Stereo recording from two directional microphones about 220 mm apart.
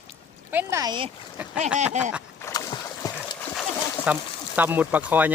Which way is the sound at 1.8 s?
30° right (ahead or behind).